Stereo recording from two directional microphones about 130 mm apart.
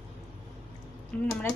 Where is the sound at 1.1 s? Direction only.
10° left (ahead or behind).